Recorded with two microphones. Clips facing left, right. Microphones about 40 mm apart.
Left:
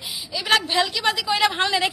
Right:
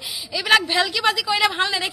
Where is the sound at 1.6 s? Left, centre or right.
Left.